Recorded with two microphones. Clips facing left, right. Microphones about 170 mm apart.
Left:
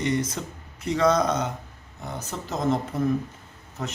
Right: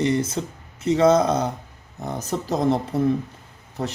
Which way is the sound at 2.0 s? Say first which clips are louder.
Right 7 dB; 40° right (ahead or behind).